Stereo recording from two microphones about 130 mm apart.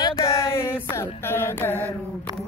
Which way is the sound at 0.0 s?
25° left (ahead or behind).